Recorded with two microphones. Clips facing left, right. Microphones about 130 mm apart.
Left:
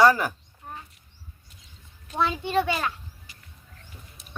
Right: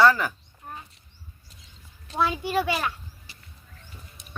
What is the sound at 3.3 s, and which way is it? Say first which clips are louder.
Bird: right 1 dB; 30° right (ahead or behind).